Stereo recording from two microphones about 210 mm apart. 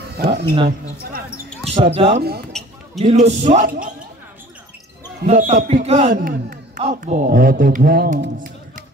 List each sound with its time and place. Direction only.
0.2 s speech: 55° right (ahead or behind)
1.8 s speech: 30° right (ahead or behind)
2.5 s basketball bounce: centre (ahead or behind)
3.0 s speech: 30° right (ahead or behind)
5.2 s speech: 30° right (ahead or behind)